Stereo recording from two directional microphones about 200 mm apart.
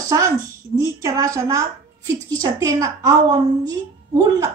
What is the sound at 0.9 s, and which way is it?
A woman's voice, 15° right (ahead or behind).